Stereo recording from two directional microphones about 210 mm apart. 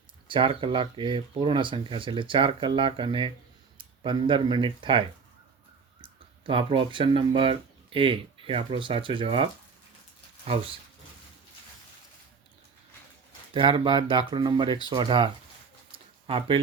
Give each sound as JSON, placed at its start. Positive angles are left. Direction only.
{"t": 0.3, "sound": "speech", "side_deg": -25}
{"t": 13.5, "sound": "speech", "side_deg": -25}